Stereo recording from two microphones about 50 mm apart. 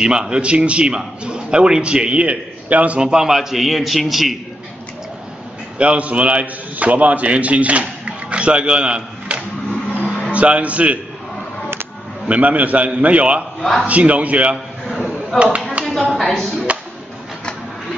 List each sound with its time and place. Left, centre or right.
0.0 s a man's voice: centre
3.0 s a man's voice: centre
5.8 s a man's voice: right
12.3 s a man's voice: right
13.6 s a man's voice: centre
13.8 s a man's voice: right
15.8 s a sound: centre
16.1 s a man's voice: centre